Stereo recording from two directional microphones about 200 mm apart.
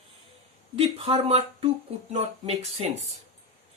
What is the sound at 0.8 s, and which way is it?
Speech, 30° right (ahead or behind).